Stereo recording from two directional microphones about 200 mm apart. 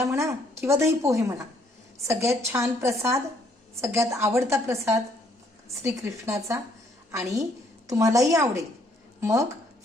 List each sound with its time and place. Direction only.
0.0 s a woman's voice: 15° right (ahead or behind)